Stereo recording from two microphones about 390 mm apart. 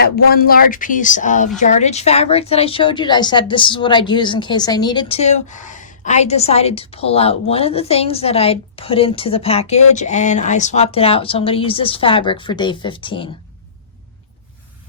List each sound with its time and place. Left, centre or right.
0.3 s a woman's voice: left